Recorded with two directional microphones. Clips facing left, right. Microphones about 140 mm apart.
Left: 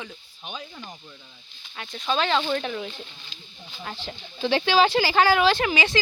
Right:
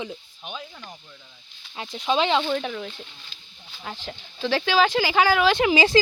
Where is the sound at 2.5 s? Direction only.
5° right (ahead or behind).